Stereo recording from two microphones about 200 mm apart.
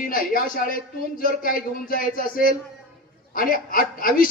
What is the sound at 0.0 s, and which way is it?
A man's voice, 45° left (ahead or behind).